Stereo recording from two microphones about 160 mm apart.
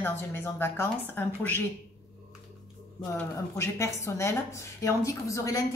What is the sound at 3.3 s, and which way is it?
A woman's voice, 20° left (ahead or behind).